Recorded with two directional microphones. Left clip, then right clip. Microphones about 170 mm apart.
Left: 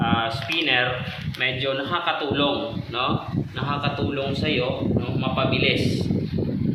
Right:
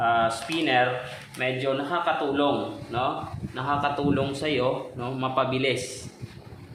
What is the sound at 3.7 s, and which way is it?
Speech, 55° right (ahead or behind).